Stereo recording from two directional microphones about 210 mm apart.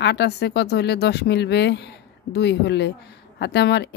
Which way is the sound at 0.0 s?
55° left (ahead or behind).